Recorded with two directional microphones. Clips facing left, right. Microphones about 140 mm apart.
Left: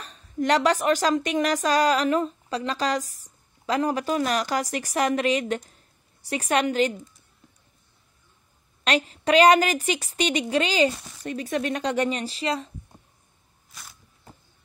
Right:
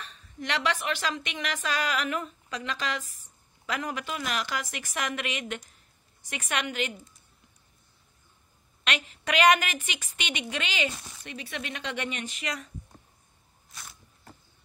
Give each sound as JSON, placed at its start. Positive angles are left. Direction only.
{"t": 0.0, "sound": "a woman's voice", "side_deg": 40}
{"t": 8.8, "sound": "a woman's voice", "side_deg": 35}
{"t": 13.7, "sound": "a sound", "side_deg": 0}